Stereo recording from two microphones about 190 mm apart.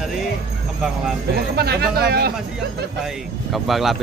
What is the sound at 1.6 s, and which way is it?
Speech, 55° right (ahead or behind).